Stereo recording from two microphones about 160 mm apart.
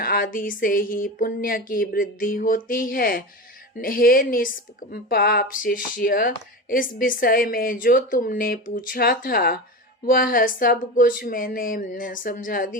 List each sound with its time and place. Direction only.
0.0 s a woman's voice: 65° left (ahead or behind)